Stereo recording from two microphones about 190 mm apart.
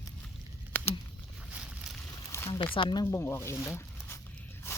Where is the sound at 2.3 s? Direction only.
20° left (ahead or behind).